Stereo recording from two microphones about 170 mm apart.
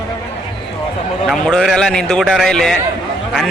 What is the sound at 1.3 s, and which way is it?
A man's voice, centre (ahead or behind).